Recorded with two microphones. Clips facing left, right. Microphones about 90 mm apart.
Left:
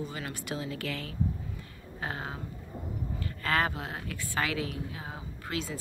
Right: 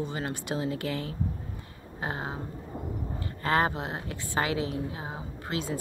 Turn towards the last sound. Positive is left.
turn(degrees=-25)  # may be behind; listen again after turning